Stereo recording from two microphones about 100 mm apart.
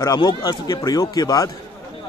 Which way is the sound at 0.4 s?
40° left (ahead or behind).